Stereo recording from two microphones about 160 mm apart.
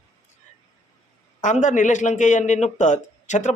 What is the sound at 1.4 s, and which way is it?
Speech, 50° left (ahead or behind).